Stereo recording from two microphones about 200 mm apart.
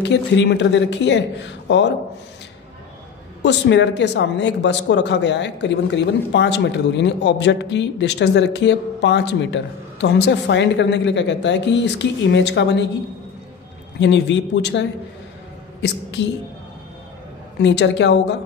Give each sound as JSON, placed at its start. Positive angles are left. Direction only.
{"t": 0.0, "sound": "speech", "side_deg": 60}
{"t": 3.4, "sound": "speech", "side_deg": 60}
{"t": 13.9, "sound": "a woman's voice", "side_deg": 65}
{"t": 17.6, "sound": "speech", "side_deg": 60}